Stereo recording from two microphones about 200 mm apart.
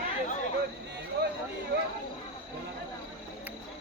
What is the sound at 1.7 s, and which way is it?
Speech, 55° right (ahead or behind).